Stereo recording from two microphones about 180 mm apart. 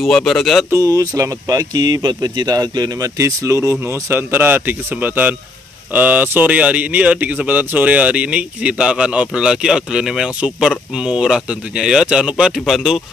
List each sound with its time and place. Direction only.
0.0 s speech: centre (ahead or behind)
0.7 s speech: 15° right (ahead or behind); by 13.0 s centre (ahead or behind)